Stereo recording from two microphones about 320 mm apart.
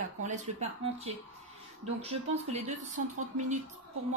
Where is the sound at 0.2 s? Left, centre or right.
Right.